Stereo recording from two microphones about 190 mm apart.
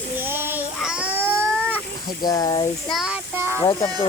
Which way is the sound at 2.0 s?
20° left (ahead or behind).